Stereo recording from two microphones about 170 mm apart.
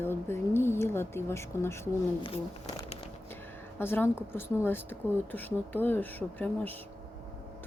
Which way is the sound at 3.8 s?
15° left (ahead or behind).